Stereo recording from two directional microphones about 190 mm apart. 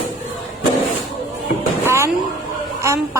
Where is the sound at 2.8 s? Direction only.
15° right (ahead or behind).